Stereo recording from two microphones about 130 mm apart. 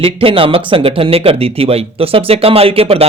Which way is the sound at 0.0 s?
45° right (ahead or behind).